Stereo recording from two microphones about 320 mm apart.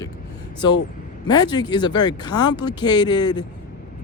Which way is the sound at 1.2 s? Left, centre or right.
Centre.